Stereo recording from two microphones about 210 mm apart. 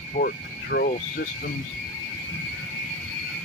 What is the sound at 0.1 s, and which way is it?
Speech, 50° left (ahead or behind).